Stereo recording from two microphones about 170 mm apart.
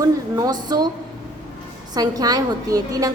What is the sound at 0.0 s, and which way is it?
Speech, 20° right (ahead or behind).